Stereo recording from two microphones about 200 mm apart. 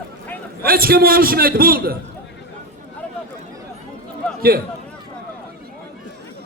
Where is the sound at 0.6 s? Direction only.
50° right (ahead or behind).